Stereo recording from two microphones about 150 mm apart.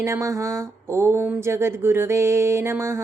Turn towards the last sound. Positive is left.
turn(degrees=-20)  # may be behind; listen again after turning